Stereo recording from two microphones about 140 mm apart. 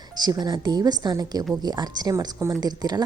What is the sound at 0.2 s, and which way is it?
Speech, 30° right (ahead or behind).